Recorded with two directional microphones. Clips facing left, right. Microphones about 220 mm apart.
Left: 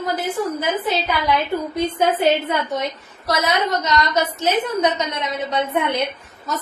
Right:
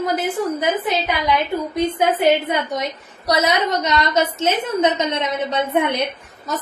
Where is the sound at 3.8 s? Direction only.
20° right (ahead or behind).